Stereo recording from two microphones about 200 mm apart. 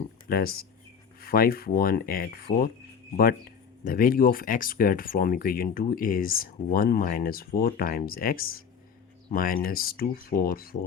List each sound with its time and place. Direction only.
0.3 s speech: 50° left (ahead or behind)
3.8 s speech: 45° left (ahead or behind)